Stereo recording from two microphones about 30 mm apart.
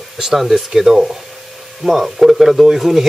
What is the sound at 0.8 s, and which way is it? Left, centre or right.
Speech, right.